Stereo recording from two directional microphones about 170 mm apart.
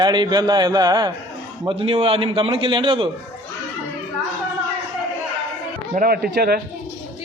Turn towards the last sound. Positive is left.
turn(degrees=-65)  # may be behind; listen again after turning